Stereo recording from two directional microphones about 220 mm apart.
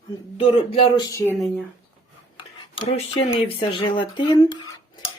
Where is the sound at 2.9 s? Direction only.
25° left (ahead or behind).